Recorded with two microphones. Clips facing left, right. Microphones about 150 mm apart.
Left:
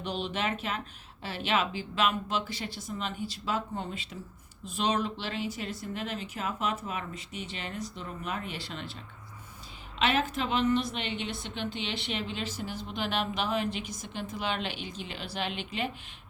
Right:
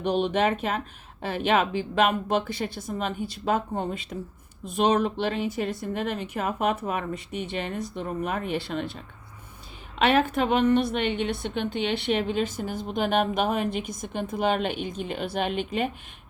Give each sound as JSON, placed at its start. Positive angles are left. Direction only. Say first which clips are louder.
{"t": 0.0, "sound": "a woman's voice", "louder": "right 9 dB", "side_deg": -50}
{"t": 10.0, "sound": "a woman's voice", "louder": "right 6 dB", "side_deg": -55}